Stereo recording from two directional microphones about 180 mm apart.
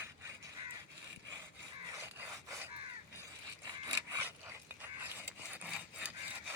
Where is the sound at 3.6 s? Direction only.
20° right (ahead or behind).